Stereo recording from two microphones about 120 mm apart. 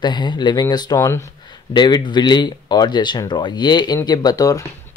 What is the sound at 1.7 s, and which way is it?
Speech, 35° left (ahead or behind).